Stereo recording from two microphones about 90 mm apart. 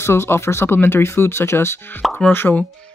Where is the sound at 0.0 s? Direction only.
30° left (ahead or behind).